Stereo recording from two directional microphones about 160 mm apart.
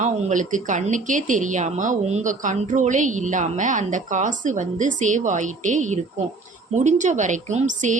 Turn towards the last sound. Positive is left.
turn(degrees=-50)  # may be behind; listen again after turning